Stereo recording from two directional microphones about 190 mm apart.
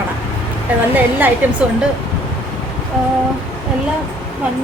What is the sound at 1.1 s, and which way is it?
Speech, 10° right (ahead or behind).